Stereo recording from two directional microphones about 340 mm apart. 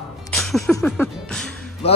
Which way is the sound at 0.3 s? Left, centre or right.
Centre.